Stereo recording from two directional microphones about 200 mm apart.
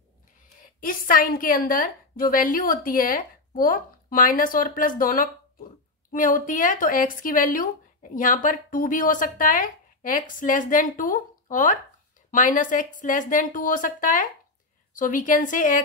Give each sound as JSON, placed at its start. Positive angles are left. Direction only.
{"t": 0.7, "sound": "a woman's voice", "side_deg": 45}